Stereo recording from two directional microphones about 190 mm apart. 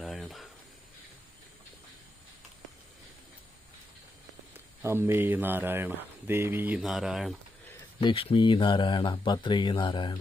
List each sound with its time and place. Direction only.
0.0 s a sound: centre (ahead or behind)
4.5 s speech: 10° right (ahead or behind)
8.0 s speech: 30° left (ahead or behind)